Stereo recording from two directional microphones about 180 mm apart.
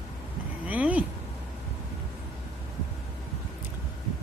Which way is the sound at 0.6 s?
10° right (ahead or behind).